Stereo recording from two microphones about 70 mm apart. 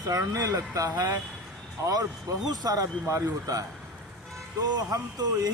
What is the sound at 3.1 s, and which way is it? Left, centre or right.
Speech, right.